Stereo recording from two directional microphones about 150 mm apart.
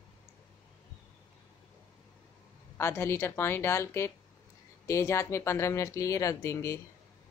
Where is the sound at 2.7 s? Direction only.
15° left (ahead or behind).